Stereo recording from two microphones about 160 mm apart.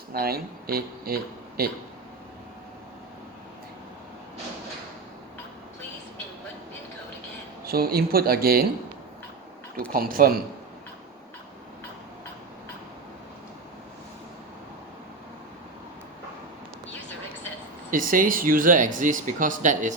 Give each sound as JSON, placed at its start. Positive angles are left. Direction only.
{"t": 0.1, "sound": "speech", "side_deg": -70}
{"t": 7.6, "sound": "speech", "side_deg": -70}
{"t": 9.9, "sound": "speech", "side_deg": -65}
{"t": 17.9, "sound": "speech", "side_deg": -60}